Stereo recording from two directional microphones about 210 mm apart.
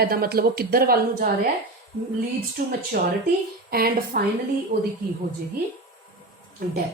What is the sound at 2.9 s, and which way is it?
Speech, 45° right (ahead or behind).